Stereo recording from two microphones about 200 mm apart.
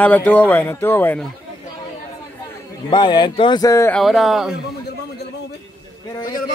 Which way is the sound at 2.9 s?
20° left (ahead or behind).